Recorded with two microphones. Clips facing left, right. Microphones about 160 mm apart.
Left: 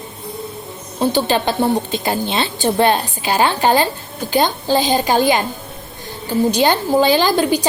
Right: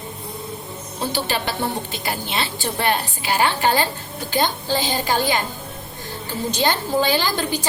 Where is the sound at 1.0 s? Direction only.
20° left (ahead or behind).